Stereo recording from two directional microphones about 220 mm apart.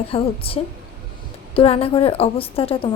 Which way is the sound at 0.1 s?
25° left (ahead or behind).